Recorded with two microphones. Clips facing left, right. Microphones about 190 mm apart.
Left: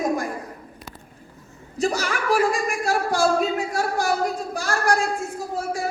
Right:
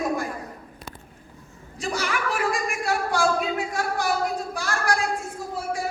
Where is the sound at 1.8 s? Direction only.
40° left (ahead or behind).